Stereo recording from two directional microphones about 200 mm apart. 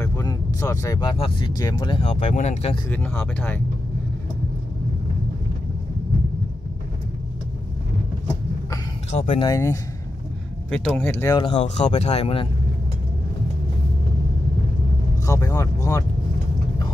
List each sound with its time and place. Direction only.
0.0 s vehicle: 15° left (ahead or behind)
1.6 s speech: 20° left (ahead or behind)
2.9 s speech: 10° left (ahead or behind)
9.1 s speech: 35° left (ahead or behind)
9.4 s speech: 15° left (ahead or behind)
10.7 s speech: 5° left (ahead or behind)
11.3 s speech: 30° left (ahead or behind)
15.2 s speech: 15° left (ahead or behind)